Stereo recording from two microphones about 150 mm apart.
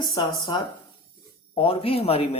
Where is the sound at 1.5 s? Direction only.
40° left (ahead or behind).